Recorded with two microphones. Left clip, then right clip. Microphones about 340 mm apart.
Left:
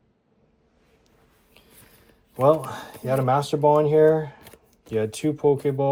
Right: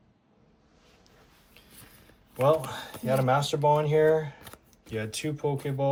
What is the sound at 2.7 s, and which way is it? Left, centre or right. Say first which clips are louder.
Speech: left 3 dB; centre.